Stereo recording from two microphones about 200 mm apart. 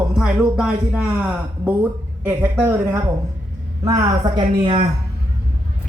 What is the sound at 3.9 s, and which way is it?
Speech, 25° right (ahead or behind).